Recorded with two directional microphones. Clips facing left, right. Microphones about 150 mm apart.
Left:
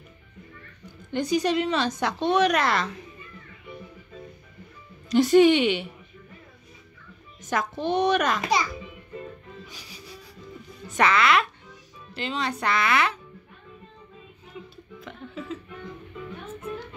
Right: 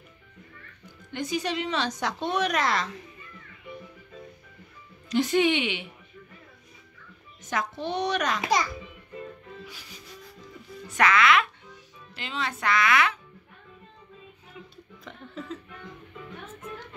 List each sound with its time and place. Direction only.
1.1 s a woman's voice: 40° left (ahead or behind); by 2.9 s 60° left (ahead or behind)
5.1 s speech: 40° left (ahead or behind)
7.4 s a child's voice: 50° left (ahead or behind)
9.8 s music: 10° left (ahead or behind)
11.0 s speech: 30° left (ahead or behind)
15.0 s a sound: 5° left (ahead or behind)